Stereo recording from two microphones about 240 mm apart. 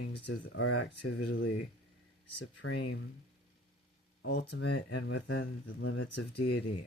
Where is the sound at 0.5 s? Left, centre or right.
Left.